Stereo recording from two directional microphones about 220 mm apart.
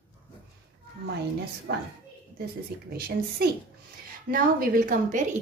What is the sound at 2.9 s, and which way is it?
A woman's voice, 45° right (ahead or behind).